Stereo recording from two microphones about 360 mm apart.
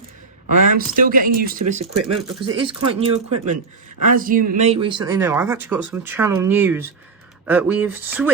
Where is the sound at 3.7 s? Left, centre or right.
Right.